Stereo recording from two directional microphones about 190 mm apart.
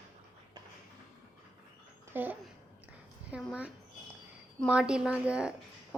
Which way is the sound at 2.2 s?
10° right (ahead or behind).